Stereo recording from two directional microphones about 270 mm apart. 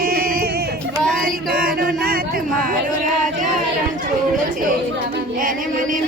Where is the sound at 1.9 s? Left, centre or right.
Right.